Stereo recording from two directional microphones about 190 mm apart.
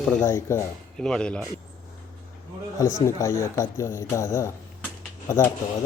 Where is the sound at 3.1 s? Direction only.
15° left (ahead or behind).